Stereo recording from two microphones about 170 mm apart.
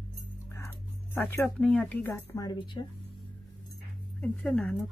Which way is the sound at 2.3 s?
25° left (ahead or behind).